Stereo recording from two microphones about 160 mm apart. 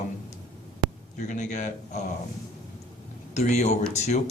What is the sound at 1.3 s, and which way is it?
Speech, 50° left (ahead or behind).